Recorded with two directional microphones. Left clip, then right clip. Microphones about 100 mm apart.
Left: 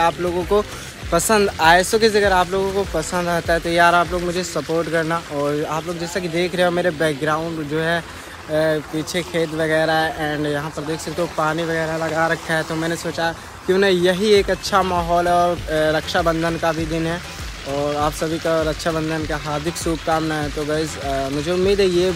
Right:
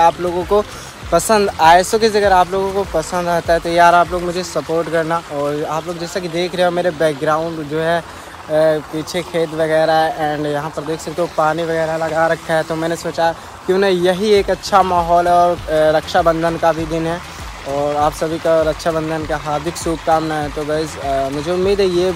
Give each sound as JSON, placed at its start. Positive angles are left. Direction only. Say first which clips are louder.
{"t": 0.5, "sound": "speech", "louder": "right 3 dB", "side_deg": 10}
{"t": 5.4, "sound": "speech", "louder": "even", "side_deg": -40}
{"t": 5.9, "sound": "speech", "louder": "right 2 dB", "side_deg": 15}